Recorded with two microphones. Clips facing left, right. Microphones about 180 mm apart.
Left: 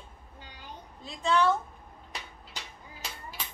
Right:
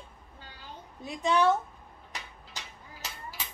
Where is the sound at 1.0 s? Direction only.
15° right (ahead or behind).